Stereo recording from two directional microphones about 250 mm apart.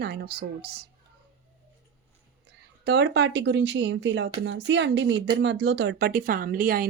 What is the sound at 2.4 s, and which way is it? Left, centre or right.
Speech, right.